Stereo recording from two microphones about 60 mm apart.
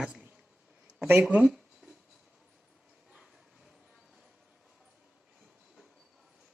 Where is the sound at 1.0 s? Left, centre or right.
Right.